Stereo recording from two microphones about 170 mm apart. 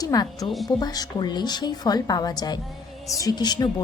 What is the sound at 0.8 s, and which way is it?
A woman's voice, 25° left (ahead or behind).